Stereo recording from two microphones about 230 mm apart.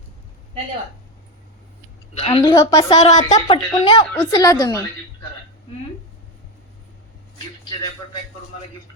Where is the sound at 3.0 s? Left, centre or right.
Left.